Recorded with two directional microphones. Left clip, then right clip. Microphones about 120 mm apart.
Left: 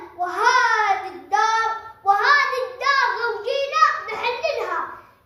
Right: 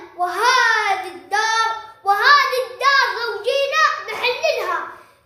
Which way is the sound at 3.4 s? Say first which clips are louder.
Right 2 dB; 15° right (ahead or behind).